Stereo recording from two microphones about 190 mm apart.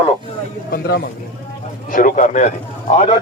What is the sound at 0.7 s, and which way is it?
A man's voice, 55° left (ahead or behind).